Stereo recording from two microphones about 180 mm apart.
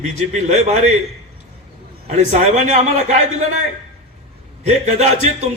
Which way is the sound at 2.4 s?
40° right (ahead or behind).